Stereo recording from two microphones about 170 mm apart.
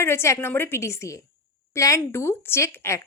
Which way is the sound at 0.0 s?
15° left (ahead or behind).